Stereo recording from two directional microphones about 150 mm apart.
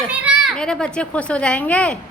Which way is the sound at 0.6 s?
5° left (ahead or behind).